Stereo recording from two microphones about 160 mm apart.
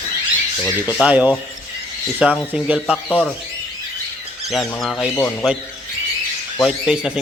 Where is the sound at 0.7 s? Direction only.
10° right (ahead or behind).